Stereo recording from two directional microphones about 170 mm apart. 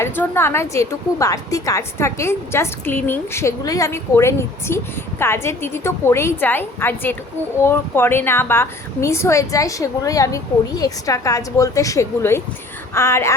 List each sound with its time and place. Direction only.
0.0 s a woman's voice: 15° left (ahead or behind)